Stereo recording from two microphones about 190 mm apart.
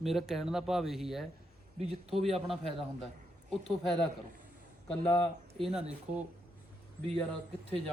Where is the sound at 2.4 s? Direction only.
Centre (ahead or behind).